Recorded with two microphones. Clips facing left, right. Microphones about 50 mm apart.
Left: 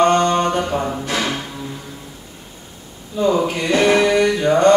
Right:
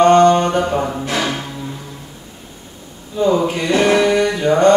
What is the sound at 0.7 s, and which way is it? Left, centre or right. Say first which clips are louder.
Music: right 2 dB; centre.